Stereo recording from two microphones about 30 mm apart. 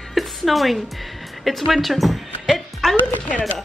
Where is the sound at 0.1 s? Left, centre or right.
Centre.